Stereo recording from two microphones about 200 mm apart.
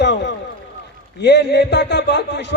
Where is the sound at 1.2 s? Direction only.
60° left (ahead or behind).